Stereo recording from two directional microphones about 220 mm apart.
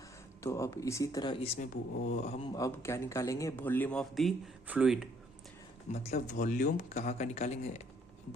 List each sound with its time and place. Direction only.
0.4 s speech: 15° left (ahead or behind)
1.5 s speech: 35° left (ahead or behind); by 5.0 s 5° right (ahead or behind)
5.9 s speech: 30° left (ahead or behind)